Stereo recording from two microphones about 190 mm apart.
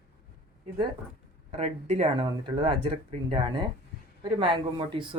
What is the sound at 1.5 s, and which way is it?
Speech, 35° right (ahead or behind).